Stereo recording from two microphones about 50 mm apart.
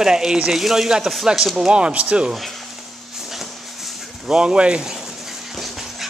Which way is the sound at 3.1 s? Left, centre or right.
Centre.